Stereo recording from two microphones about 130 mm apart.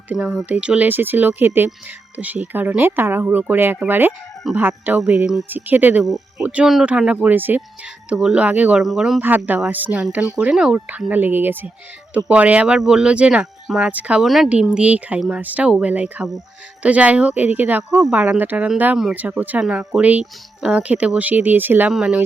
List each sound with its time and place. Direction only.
0.1 s speech: 5° right (ahead or behind)
5.5 s speech: 15° right (ahead or behind)
9.2 s speech: 15° right (ahead or behind)